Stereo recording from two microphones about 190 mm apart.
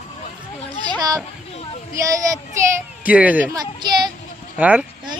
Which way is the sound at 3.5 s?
20° right (ahead or behind).